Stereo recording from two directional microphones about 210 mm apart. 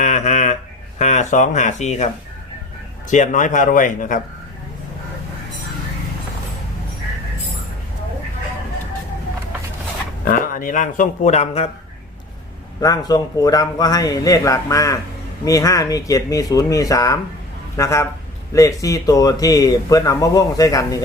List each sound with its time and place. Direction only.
0.0 s a sound: 35° left (ahead or behind)
0.9 s speech: 35° left (ahead or behind)
3.1 s speech: 35° left (ahead or behind)
10.2 s speech: 40° left (ahead or behind)
12.8 s speech: 20° left (ahead or behind)